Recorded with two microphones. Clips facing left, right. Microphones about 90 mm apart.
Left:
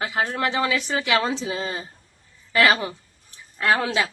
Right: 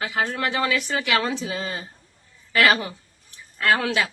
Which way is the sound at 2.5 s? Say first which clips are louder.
Even; 25° left (ahead or behind).